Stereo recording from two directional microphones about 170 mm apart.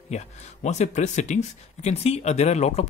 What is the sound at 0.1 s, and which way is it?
Speech, 40° left (ahead or behind).